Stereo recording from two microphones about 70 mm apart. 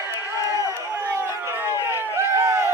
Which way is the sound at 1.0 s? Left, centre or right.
Right.